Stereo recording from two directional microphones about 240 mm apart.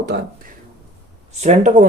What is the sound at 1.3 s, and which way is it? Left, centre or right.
Speech, right.